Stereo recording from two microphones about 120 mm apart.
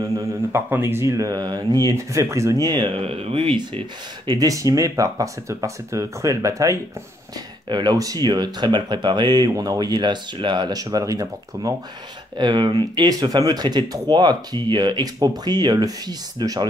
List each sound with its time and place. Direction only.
0.5 s speech: 20° right (ahead or behind); by 2.9 s 35° right (ahead or behind)
2.9 s speech: 55° right (ahead or behind)
4.3 s speech: 30° right (ahead or behind)